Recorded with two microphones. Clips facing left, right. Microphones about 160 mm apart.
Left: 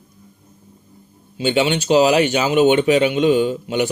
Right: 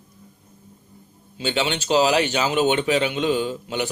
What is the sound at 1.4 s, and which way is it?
Speech, 15° left (ahead or behind).